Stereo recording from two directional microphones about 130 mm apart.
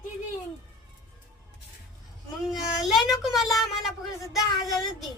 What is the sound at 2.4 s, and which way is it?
A child's voice, centre (ahead or behind).